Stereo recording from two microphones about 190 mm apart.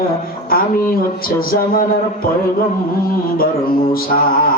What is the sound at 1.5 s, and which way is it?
Speech, 50° left (ahead or behind).